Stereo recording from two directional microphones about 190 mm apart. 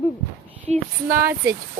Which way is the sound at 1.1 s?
15° right (ahead or behind).